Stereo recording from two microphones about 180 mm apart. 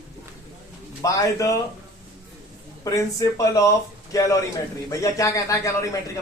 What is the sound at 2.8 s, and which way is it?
A man's voice, 20° left (ahead or behind).